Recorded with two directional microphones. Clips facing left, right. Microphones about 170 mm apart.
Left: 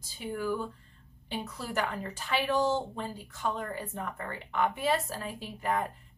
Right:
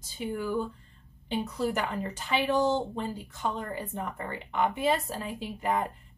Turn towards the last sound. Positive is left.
turn(degrees=-15)  # may be behind; listen again after turning